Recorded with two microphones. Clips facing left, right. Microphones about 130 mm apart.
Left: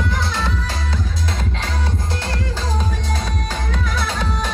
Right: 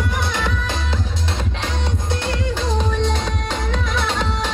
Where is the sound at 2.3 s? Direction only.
20° right (ahead or behind).